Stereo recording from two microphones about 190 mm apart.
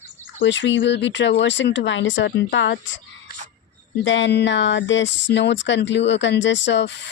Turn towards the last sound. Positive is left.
turn(degrees=70)  # may be behind; listen again after turning